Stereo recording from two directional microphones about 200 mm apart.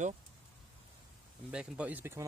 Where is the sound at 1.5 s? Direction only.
5° right (ahead or behind).